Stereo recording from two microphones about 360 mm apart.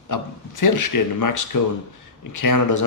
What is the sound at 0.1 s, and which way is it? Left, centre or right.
A man's voice, left.